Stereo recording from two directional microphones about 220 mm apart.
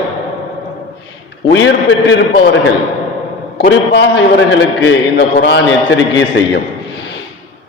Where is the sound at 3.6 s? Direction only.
50° left (ahead or behind).